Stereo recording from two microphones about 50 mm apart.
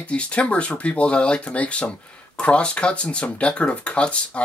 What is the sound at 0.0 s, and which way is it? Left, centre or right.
Speech, left.